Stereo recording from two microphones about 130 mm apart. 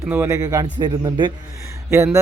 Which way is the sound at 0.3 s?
30° right (ahead or behind).